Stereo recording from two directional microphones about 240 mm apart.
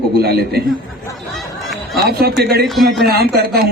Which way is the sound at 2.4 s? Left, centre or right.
Right.